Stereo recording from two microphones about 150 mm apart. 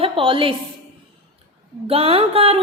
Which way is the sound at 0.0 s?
35° right (ahead or behind).